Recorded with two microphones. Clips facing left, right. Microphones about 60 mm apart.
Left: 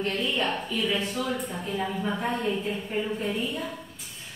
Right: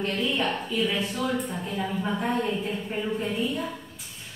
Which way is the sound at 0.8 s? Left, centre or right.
Centre.